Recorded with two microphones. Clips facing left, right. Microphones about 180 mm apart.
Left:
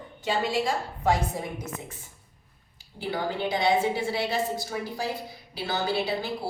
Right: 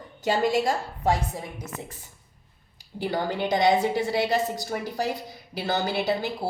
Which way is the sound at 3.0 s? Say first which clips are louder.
Right 2 dB; 45° right (ahead or behind).